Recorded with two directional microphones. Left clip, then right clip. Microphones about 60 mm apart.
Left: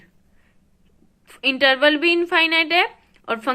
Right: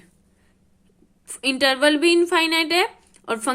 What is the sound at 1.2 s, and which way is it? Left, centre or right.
A woman's voice, right.